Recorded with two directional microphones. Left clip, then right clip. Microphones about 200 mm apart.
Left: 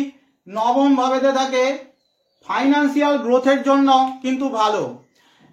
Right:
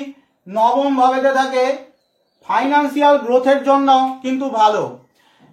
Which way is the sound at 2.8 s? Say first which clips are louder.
Right 5 dB; 30° left (ahead or behind).